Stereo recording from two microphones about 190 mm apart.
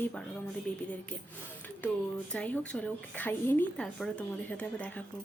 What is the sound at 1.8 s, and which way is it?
Speech, 10° left (ahead or behind).